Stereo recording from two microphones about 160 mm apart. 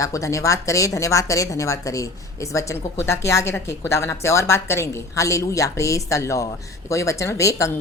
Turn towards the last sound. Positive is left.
turn(degrees=20)  # may be behind; listen again after turning